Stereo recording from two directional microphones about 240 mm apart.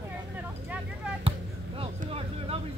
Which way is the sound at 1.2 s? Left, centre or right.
Right.